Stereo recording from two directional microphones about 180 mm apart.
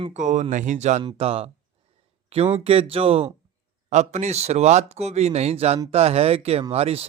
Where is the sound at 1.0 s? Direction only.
30° right (ahead or behind).